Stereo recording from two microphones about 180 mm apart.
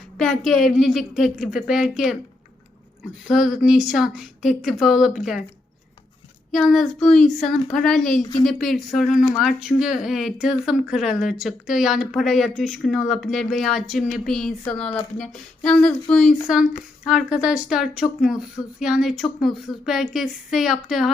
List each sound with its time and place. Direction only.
0.2 s speech: centre (ahead or behind)
3.2 s speech: 5° right (ahead or behind)
6.5 s speech: centre (ahead or behind)
8.2 s a woman's voice: 20° left (ahead or behind)
8.4 s speech: centre (ahead or behind)